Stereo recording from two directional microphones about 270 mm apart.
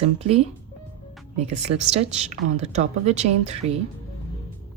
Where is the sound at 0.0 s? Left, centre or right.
Right.